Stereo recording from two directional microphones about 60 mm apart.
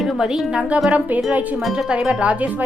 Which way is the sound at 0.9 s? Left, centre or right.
Right.